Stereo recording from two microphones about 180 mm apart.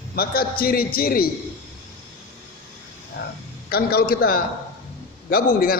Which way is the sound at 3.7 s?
55° left (ahead or behind).